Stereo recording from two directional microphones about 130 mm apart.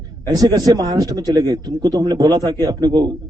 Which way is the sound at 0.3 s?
30° right (ahead or behind).